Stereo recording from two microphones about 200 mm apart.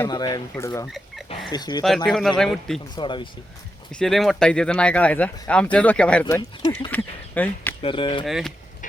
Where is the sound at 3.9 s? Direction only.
Centre (ahead or behind).